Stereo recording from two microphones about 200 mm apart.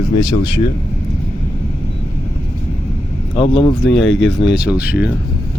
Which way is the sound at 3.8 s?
Centre (ahead or behind).